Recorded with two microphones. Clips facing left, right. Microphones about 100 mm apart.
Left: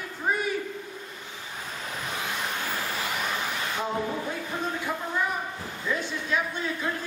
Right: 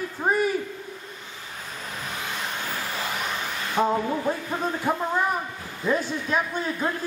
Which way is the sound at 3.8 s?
45° right (ahead or behind).